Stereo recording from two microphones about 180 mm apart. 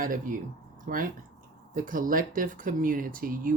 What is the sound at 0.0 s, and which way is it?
Speech, 50° right (ahead or behind).